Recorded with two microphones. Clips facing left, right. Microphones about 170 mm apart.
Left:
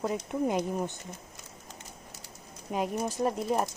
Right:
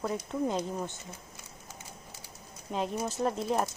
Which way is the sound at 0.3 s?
15° left (ahead or behind).